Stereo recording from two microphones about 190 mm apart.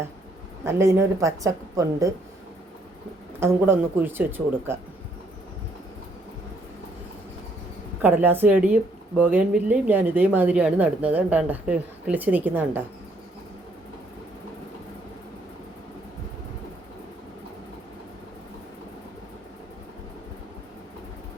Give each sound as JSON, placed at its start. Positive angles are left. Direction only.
{"t": 0.6, "sound": "speech", "side_deg": -15}
{"t": 3.4, "sound": "speech", "side_deg": -10}
{"t": 8.0, "sound": "speech", "side_deg": -10}